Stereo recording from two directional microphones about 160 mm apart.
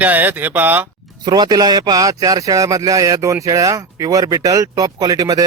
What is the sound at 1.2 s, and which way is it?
Speech, 25° right (ahead or behind).